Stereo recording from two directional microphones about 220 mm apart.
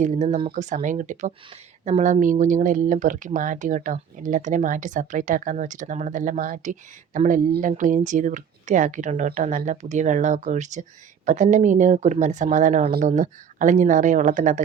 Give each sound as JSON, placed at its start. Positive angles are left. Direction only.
{"t": 0.0, "sound": "speech", "side_deg": -30}